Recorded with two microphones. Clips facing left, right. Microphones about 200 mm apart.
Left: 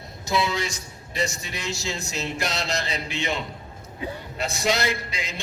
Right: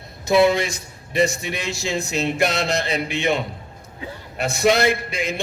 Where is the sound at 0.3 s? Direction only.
60° right (ahead or behind).